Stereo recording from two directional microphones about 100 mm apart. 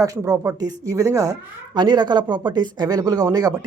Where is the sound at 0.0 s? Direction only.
35° right (ahead or behind).